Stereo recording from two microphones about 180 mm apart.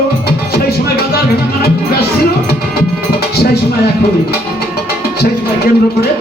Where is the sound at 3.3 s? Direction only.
60° left (ahead or behind).